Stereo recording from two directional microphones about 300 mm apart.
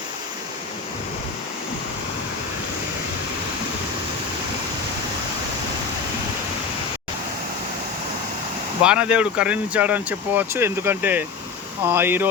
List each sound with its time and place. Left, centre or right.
8.8 s speech: centre